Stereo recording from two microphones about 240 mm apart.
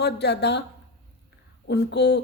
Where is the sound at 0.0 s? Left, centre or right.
Left.